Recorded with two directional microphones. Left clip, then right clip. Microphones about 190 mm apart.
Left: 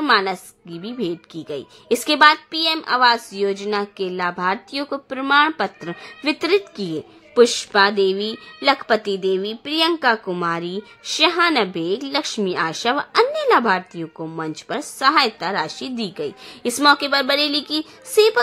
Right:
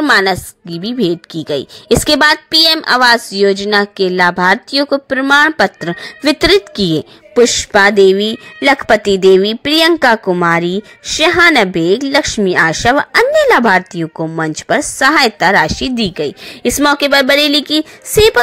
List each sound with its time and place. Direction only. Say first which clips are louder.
0.0 s a woman's voice: right 7 dB; 40° right (ahead or behind)